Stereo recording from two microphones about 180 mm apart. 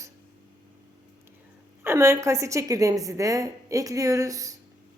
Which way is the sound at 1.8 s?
15° right (ahead or behind).